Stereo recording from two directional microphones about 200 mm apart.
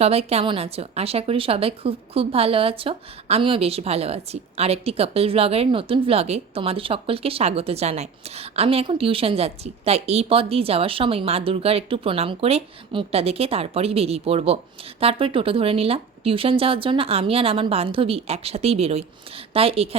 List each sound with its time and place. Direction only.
0.0 s a woman's voice: 30° right (ahead or behind)